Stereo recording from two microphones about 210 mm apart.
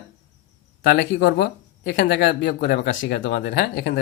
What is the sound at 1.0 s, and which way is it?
Speech, 50° left (ahead or behind).